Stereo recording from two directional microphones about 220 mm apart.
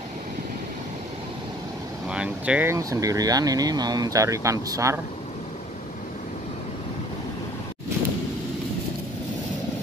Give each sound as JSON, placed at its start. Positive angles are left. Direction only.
{"t": 2.0, "sound": "speech", "side_deg": -5}